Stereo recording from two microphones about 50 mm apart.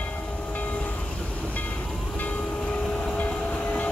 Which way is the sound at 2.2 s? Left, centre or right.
Left.